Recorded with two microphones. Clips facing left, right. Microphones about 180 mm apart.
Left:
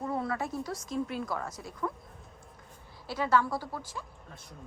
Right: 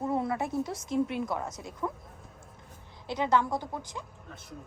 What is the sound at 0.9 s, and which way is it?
A woman's voice, 20° right (ahead or behind).